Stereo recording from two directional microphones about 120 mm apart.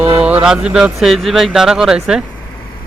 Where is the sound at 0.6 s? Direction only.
5° right (ahead or behind).